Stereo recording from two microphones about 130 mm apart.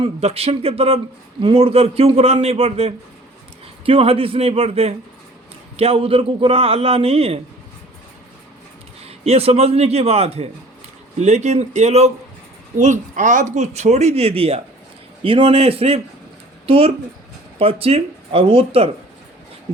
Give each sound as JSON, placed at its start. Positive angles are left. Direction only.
{"t": 0.0, "sound": "a man's voice", "side_deg": -50}
{"t": 9.0, "sound": "a man's voice", "side_deg": -50}
{"t": 12.8, "sound": "a man's voice", "side_deg": -70}